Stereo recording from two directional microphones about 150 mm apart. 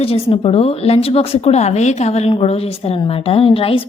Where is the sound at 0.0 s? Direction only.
40° left (ahead or behind).